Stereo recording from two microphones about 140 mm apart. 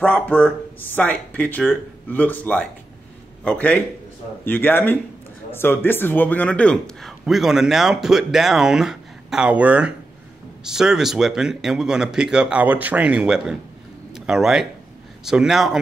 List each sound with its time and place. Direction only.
0.0 s a man's voice: 10° left (ahead or behind)